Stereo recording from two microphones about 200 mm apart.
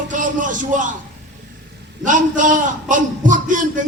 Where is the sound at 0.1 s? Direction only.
40° right (ahead or behind).